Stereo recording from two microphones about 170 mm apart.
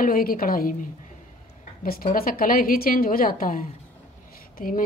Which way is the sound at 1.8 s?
55° left (ahead or behind).